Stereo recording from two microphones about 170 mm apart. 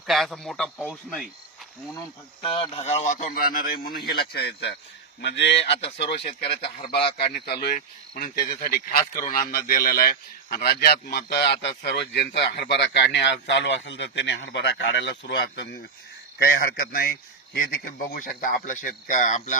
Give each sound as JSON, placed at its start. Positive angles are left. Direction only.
{"t": 0.1, "sound": "speech", "side_deg": 0}
{"t": 2.4, "sound": "a man's voice", "side_deg": 35}
{"t": 5.2, "sound": "speech", "side_deg": 90}
{"t": 6.1, "sound": "speech", "side_deg": 35}
{"t": 6.6, "sound": "speech", "side_deg": 70}
{"t": 7.0, "sound": "speech", "side_deg": 30}
{"t": 7.3, "sound": "a man's voice", "side_deg": 70}
{"t": 16.4, "sound": "a man's voice", "side_deg": 60}